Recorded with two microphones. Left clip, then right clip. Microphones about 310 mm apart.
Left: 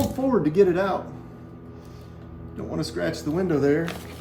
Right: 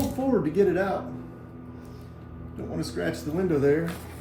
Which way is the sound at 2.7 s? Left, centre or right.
Left.